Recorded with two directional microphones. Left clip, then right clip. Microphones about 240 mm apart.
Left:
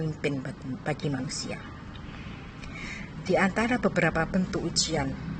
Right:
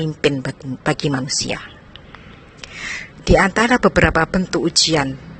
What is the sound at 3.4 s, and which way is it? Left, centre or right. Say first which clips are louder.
Speech: right 11 dB; right.